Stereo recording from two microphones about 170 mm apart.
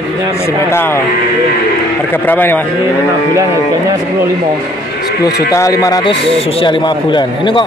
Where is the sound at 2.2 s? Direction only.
10° left (ahead or behind).